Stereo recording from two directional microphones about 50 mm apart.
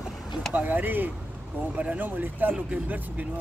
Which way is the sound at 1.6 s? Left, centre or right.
Right.